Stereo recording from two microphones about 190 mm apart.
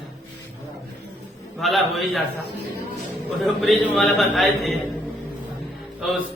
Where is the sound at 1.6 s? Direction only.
Centre (ahead or behind).